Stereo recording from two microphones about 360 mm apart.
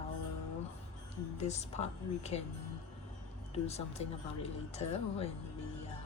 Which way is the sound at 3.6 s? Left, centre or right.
Centre.